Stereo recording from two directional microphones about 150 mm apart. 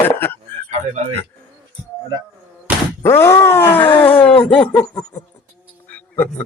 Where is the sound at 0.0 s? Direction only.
15° left (ahead or behind).